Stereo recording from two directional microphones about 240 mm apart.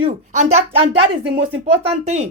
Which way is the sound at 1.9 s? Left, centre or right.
Right.